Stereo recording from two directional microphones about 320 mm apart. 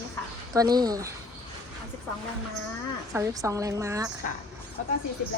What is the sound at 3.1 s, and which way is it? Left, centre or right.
A woman's voice, centre.